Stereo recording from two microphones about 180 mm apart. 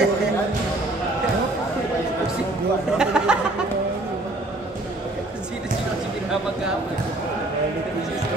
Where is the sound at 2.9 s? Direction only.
5° right (ahead or behind).